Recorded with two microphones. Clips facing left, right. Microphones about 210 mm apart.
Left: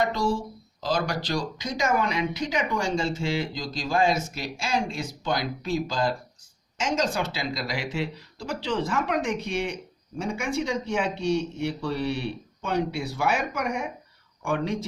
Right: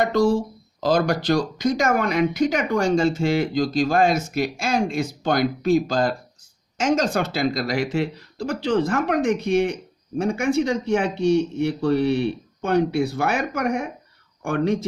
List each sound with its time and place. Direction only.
0.0 s speech: 50° right (ahead or behind)